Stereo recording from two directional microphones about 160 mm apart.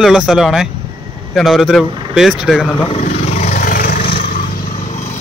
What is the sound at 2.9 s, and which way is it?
Vehicle, 50° left (ahead or behind).